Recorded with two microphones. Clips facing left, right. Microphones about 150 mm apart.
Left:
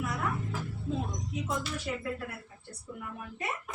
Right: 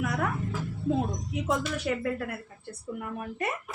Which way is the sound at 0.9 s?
70° right (ahead or behind).